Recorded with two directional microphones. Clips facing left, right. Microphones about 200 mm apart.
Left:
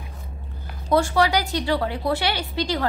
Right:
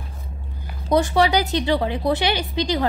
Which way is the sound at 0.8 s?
20° right (ahead or behind).